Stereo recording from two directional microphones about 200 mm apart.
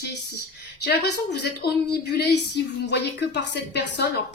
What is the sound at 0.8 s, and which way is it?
Speech, 55° left (ahead or behind).